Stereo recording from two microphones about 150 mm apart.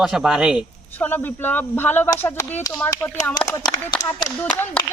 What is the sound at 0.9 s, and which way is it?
Speech, 10° left (ahead or behind).